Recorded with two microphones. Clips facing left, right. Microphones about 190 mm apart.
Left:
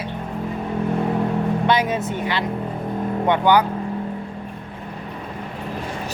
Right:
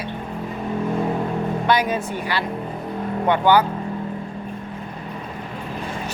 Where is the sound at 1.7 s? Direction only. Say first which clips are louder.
Right 2 dB; 25° left (ahead or behind).